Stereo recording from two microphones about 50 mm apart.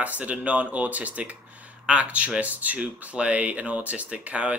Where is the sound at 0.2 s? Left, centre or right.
Right.